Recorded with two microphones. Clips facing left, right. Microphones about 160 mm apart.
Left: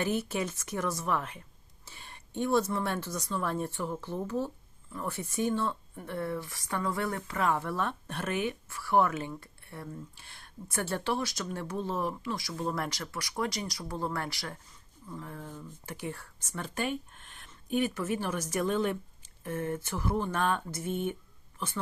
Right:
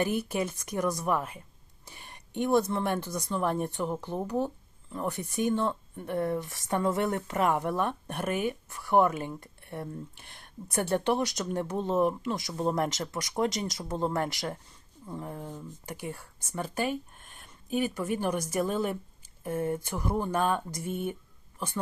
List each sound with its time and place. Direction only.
0.0 s speech: 15° right (ahead or behind)
1.8 s a sound: 15° right (ahead or behind)
2.8 s speech: 15° right (ahead or behind)